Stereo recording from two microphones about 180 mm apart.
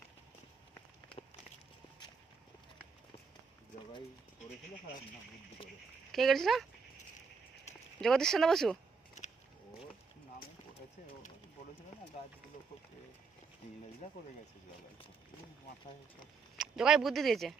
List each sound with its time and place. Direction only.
6.1 s speech: centre (ahead or behind)
8.0 s speech: centre (ahead or behind)
14.0 s speech: 45° left (ahead or behind)
16.6 s speech: 5° right (ahead or behind)